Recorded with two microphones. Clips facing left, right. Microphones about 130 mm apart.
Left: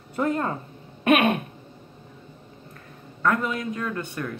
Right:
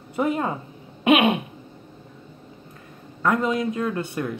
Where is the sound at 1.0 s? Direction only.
15° right (ahead or behind).